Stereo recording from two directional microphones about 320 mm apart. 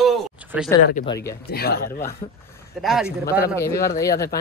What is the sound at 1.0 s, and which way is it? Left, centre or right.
Speech, centre.